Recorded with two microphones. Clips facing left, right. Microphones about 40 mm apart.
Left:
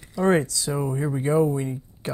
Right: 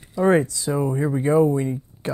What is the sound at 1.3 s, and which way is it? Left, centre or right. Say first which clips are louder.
Speech: right 3 dB; right.